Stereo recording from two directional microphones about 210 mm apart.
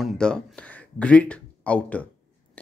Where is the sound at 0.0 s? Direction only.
Centre (ahead or behind).